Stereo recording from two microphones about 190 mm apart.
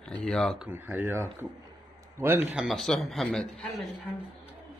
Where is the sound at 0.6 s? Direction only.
10° right (ahead or behind).